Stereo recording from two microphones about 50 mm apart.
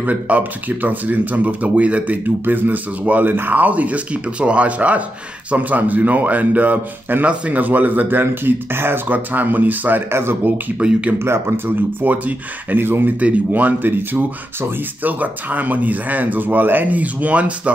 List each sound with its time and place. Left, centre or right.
0.0 s speech: right
2.2 s speech: right
10.8 s speech: right
11.1 s speech: right
12.1 s speech: right